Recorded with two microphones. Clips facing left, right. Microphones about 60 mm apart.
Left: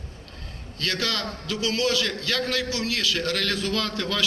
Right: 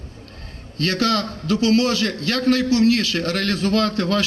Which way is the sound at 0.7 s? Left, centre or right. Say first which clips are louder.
Right 8 dB; right.